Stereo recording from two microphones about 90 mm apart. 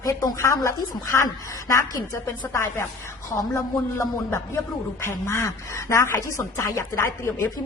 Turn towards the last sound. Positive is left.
turn(degrees=30)  # may be behind; listen again after turning